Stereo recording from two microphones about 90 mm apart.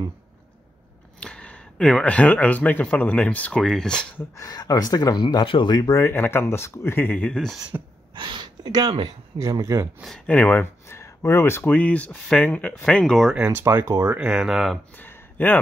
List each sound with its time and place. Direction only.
1.2 s speech: 10° left (ahead or behind)
4.5 s speech: 45° left (ahead or behind)
5.2 s speech: 60° left (ahead or behind)
5.8 s speech: 40° left (ahead or behind)
6.0 s speech: 25° left (ahead or behind)
7.3 s speech: 5° left (ahead or behind)
8.1 s a sound: 60° right (ahead or behind)
9.4 s speech: 35° right (ahead or behind)
10.2 s speech: 15° left (ahead or behind)
13.5 s speech: 25° right (ahead or behind)
14.1 s speech: 10° right (ahead or behind)
15.0 s a sound: 20° left (ahead or behind)